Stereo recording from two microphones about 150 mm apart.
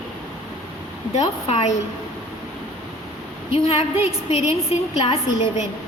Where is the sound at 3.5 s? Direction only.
40° left (ahead or behind).